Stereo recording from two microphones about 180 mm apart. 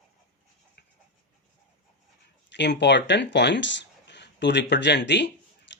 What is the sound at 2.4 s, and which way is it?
Speech, 75° left (ahead or behind).